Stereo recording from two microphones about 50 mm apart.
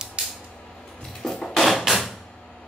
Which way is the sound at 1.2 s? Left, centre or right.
Centre.